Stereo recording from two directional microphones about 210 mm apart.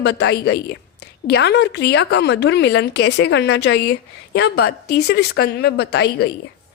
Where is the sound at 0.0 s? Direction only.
55° left (ahead or behind).